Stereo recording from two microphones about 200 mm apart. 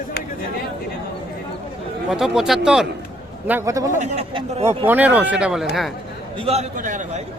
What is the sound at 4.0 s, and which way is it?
Speech, 30° right (ahead or behind).